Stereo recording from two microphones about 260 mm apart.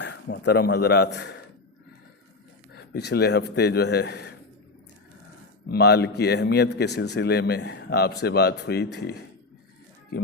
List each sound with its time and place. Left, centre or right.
0.0 s a man's voice: left
2.7 s a man's voice: left
5.6 s a man's voice: left